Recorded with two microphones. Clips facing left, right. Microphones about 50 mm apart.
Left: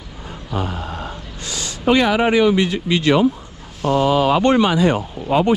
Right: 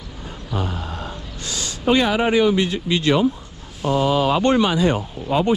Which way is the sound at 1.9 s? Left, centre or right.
Left.